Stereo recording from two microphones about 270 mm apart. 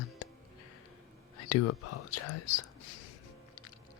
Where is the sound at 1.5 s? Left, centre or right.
Left.